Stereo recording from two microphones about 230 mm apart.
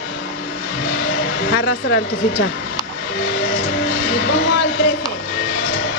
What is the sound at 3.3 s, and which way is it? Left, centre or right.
Vehicle, left.